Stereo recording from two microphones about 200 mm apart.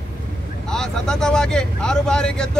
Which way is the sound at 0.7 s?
5° left (ahead or behind).